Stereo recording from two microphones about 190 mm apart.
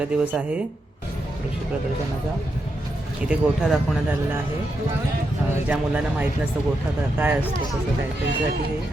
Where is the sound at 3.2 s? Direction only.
5° right (ahead or behind).